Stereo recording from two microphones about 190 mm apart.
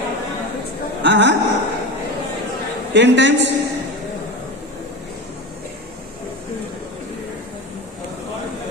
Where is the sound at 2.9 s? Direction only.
70° right (ahead or behind).